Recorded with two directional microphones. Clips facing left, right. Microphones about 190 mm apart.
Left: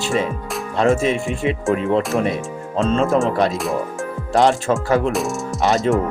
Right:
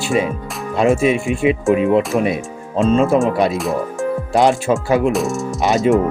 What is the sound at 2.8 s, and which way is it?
Speech, 10° right (ahead or behind).